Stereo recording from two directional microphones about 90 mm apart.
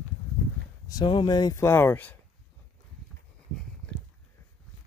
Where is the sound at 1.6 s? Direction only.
25° left (ahead or behind).